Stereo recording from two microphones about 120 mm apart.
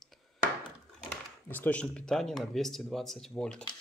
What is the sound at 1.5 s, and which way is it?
Speech, 10° left (ahead or behind).